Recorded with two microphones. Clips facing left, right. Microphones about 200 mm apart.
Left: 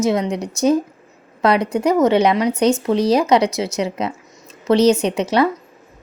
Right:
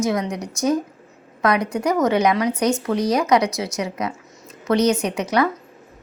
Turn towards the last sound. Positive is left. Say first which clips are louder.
# left 3 dB
turn(degrees=25)  # may be behind; listen again after turning